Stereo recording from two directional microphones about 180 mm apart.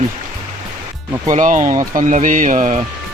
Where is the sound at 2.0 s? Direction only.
45° right (ahead or behind).